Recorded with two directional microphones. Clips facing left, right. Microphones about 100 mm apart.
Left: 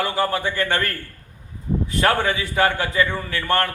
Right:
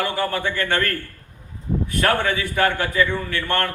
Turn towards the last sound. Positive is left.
turn(degrees=20)  # may be behind; listen again after turning